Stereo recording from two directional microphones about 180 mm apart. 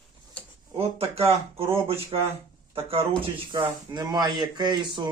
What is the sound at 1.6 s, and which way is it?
Speech, 30° right (ahead or behind).